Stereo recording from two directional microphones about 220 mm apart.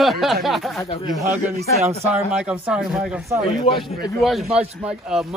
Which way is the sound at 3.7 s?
25° left (ahead or behind).